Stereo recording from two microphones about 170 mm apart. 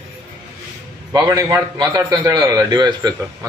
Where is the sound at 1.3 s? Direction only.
20° right (ahead or behind).